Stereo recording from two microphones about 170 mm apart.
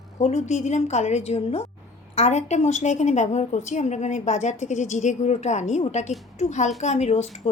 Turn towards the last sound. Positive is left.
turn(degrees=40)  # may be behind; listen again after turning